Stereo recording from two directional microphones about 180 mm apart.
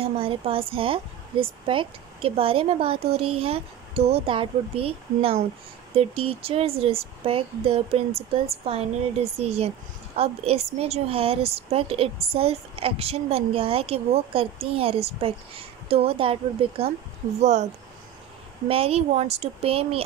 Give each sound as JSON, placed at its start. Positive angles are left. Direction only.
{"t": 0.0, "sound": "a woman's voice", "side_deg": -30}
{"t": 18.7, "sound": "a woman's voice", "side_deg": -35}